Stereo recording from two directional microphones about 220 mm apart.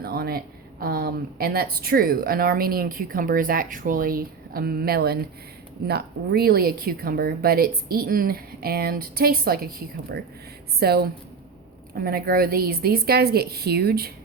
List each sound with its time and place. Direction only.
0.0 s a woman's voice: 45° right (ahead or behind)